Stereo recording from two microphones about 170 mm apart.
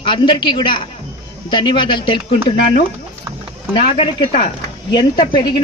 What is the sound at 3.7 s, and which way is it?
Speech, 35° left (ahead or behind).